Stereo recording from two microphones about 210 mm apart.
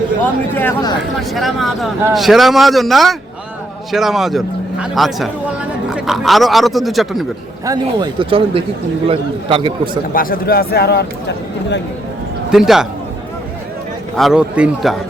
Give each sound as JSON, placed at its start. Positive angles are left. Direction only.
{"t": 0.5, "sound": "speech", "side_deg": 15}
{"t": 1.1, "sound": "a man's voice", "side_deg": 0}
{"t": 7.6, "sound": "speech", "side_deg": -20}
{"t": 10.2, "sound": "speech", "side_deg": 45}
{"t": 12.5, "sound": "a man's voice", "side_deg": 0}
{"t": 14.2, "sound": "a man's voice", "side_deg": 0}